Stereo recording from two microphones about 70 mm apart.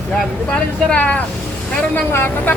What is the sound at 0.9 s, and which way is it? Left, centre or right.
Speech, centre.